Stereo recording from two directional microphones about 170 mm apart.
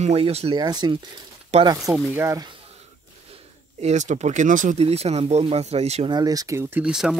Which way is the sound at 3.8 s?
45° right (ahead or behind).